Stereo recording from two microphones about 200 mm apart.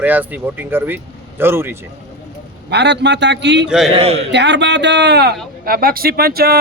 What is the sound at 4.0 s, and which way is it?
Speech, 30° right (ahead or behind).